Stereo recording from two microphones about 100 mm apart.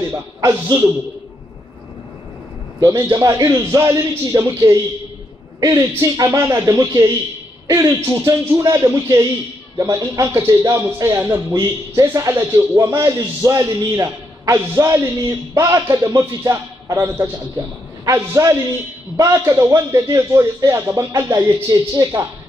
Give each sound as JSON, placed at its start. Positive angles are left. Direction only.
{"t": 2.8, "sound": "a man's voice", "side_deg": -35}
{"t": 21.1, "sound": "a man's voice", "side_deg": -35}